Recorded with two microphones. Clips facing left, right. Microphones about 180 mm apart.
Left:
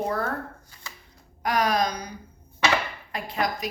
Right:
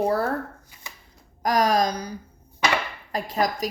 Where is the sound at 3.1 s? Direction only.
40° right (ahead or behind).